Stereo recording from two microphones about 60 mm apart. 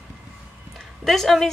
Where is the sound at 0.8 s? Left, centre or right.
Centre.